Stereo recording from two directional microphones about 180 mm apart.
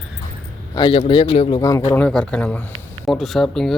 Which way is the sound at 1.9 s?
5° left (ahead or behind).